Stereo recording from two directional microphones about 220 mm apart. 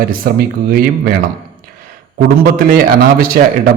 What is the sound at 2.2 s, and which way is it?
A man's voice, 40° right (ahead or behind).